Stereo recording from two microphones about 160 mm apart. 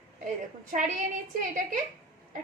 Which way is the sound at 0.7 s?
55° right (ahead or behind).